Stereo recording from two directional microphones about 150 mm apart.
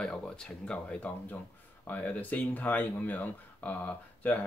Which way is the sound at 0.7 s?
10° left (ahead or behind).